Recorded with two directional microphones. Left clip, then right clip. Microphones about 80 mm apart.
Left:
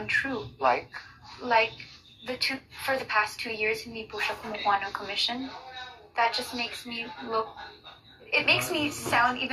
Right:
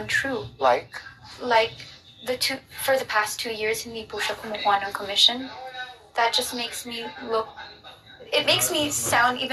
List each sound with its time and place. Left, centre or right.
0.0 s a child's voice: right